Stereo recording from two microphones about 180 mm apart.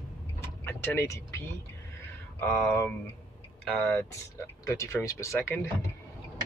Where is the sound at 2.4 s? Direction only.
10° left (ahead or behind).